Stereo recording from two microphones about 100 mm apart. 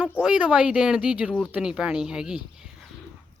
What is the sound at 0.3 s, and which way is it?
A woman's voice, 10° right (ahead or behind).